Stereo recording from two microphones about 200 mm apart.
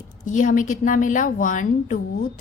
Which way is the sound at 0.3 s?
40° left (ahead or behind).